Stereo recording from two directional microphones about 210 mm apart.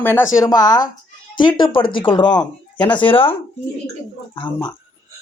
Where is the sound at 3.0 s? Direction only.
25° left (ahead or behind).